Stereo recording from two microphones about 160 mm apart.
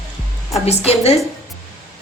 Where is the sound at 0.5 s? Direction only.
40° left (ahead or behind).